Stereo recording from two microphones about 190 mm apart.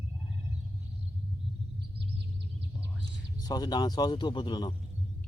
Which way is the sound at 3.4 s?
20° left (ahead or behind).